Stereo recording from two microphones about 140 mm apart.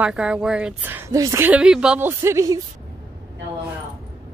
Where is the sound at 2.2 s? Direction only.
20° right (ahead or behind).